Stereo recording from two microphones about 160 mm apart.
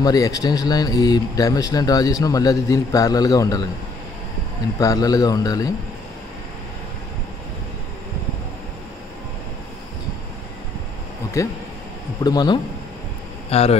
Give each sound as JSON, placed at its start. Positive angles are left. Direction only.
{"t": 0.0, "sound": "speech", "side_deg": 20}
{"t": 4.7, "sound": "speech", "side_deg": 25}
{"t": 12.2, "sound": "speech", "side_deg": 25}
{"t": 13.5, "sound": "speech", "side_deg": 40}